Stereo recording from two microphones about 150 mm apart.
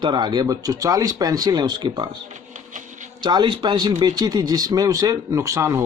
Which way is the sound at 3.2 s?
30° right (ahead or behind).